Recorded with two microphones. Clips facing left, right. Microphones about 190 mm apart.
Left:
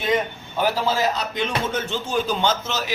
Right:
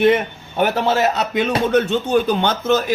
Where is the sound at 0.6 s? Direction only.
65° right (ahead or behind).